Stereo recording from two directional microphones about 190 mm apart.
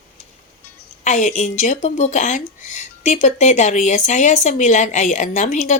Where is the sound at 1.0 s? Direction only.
40° left (ahead or behind).